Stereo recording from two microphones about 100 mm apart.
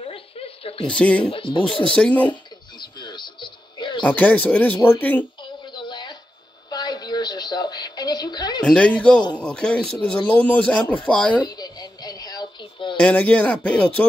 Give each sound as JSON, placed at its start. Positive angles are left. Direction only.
{"t": 0.0, "sound": "a sound", "side_deg": 70}
{"t": 0.8, "sound": "speech", "side_deg": 10}
{"t": 1.3, "sound": "speech", "side_deg": 60}
{"t": 2.0, "sound": "speech", "side_deg": 15}
{"t": 2.8, "sound": "music", "side_deg": 50}
{"t": 4.0, "sound": "speech", "side_deg": 15}
{"t": 5.4, "sound": "a sound", "side_deg": 50}
{"t": 8.6, "sound": "speech", "side_deg": 10}
{"t": 11.4, "sound": "a sound", "side_deg": 40}
{"t": 13.0, "sound": "speech", "side_deg": 15}